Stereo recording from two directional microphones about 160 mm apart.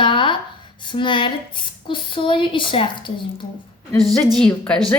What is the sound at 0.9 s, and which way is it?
Speech, 30° left (ahead or behind).